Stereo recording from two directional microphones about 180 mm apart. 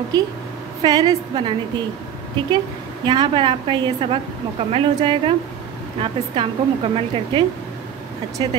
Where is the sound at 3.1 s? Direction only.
25° right (ahead or behind).